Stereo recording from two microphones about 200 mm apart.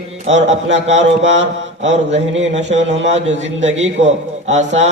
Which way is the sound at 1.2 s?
65° right (ahead or behind).